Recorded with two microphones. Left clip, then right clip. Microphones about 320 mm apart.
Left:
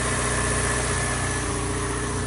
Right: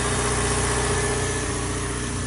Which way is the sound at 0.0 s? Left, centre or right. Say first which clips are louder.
Right 1 dB; centre.